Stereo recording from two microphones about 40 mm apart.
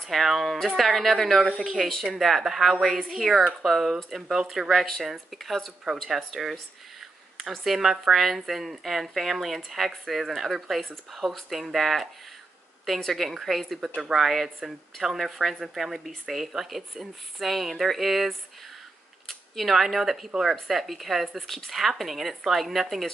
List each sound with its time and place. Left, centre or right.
0.0 s speech: centre
1.6 s speech: centre
7.5 s speech: centre
13.1 s speech: centre
13.7 s speech: centre
14.1 s speech: centre